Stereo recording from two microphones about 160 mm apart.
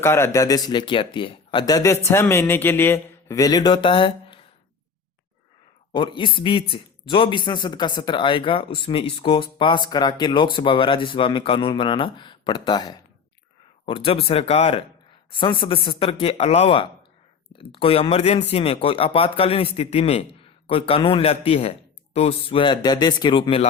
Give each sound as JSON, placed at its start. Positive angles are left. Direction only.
{"t": 0.0, "sound": "speech", "side_deg": 15}
{"t": 5.9, "sound": "speech", "side_deg": 30}